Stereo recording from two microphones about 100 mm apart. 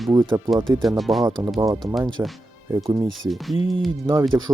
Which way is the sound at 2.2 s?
25° right (ahead or behind).